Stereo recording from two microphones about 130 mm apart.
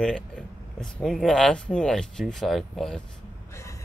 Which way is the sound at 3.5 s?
25° left (ahead or behind).